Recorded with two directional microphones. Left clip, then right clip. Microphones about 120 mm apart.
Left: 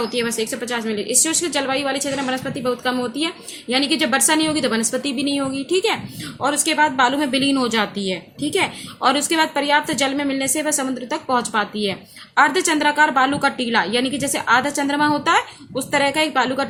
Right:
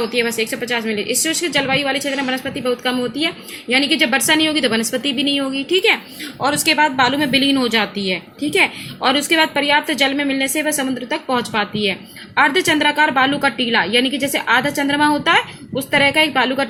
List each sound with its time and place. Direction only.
0.1 s a woman's voice: 20° right (ahead or behind)